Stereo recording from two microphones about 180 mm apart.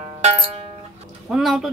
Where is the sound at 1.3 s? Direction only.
Centre (ahead or behind).